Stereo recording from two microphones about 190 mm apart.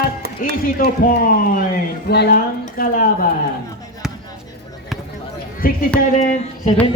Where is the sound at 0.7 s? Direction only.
50° left (ahead or behind).